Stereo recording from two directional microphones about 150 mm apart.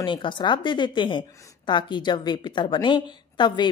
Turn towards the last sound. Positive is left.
turn(degrees=30)  # may be behind; listen again after turning